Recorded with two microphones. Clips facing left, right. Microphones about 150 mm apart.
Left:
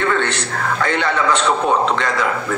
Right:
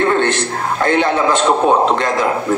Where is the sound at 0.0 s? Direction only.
40° right (ahead or behind).